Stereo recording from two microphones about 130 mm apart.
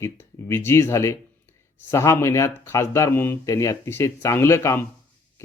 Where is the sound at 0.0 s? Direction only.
20° left (ahead or behind).